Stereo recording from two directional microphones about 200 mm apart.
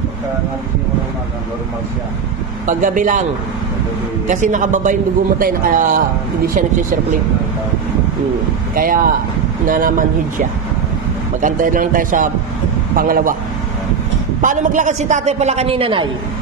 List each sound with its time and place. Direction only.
2.6 s a man's voice: 40° right (ahead or behind)
4.3 s a man's voice: 40° right (ahead or behind)
8.7 s speech: 45° right (ahead or behind)
11.4 s speech: 40° right (ahead or behind)
14.4 s a man's voice: 40° right (ahead or behind)